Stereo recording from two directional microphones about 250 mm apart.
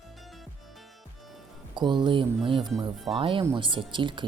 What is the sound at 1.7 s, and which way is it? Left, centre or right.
Speech, centre.